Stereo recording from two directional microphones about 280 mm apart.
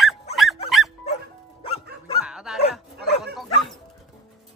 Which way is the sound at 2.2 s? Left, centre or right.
Centre.